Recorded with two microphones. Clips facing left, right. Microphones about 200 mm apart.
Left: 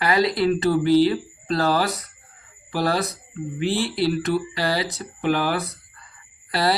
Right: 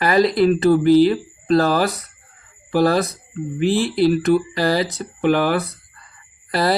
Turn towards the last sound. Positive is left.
turn(degrees=-50)  # may be behind; listen again after turning